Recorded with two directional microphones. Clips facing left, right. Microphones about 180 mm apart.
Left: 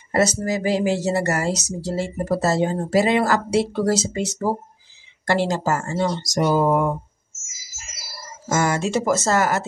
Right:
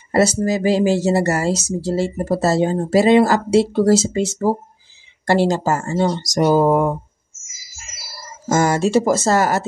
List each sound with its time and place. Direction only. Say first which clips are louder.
0.1 s speech: right 4 dB; 30° right (ahead or behind)
8.5 s speech: right 5 dB; 40° right (ahead or behind)